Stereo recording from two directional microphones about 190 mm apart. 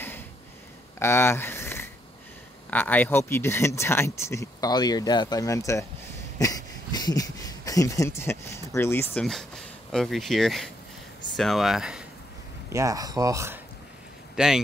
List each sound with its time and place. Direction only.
0.9 s a sound: 15° left (ahead or behind)
2.7 s speech: 10° left (ahead or behind)
12.6 s speech: 15° right (ahead or behind)
14.3 s speech: 5° right (ahead or behind)